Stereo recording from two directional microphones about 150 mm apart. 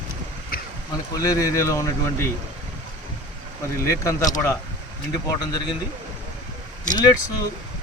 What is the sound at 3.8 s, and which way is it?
Speech, 20° left (ahead or behind).